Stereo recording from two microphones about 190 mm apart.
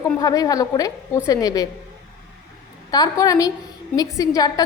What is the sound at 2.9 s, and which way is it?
A woman's voice, 20° left (ahead or behind).